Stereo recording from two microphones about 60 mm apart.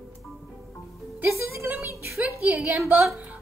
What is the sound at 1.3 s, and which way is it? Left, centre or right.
Speech, right.